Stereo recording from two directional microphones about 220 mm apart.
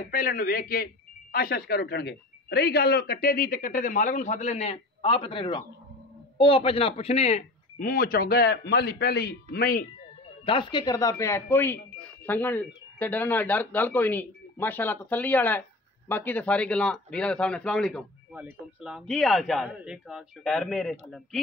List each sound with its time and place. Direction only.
0.0 s speech: 40° left (ahead or behind)
10.4 s speech: 20° left (ahead or behind); by 20.9 s centre (ahead or behind)